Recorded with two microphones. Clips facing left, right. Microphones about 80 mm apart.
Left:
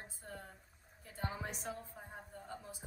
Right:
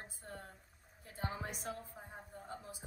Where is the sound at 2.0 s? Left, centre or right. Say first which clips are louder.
Even; centre.